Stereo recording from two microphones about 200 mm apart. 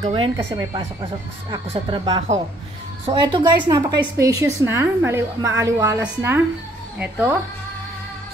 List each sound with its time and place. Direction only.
0.0 s a woman's voice: 25° right (ahead or behind); by 7.3 s 5° right (ahead or behind)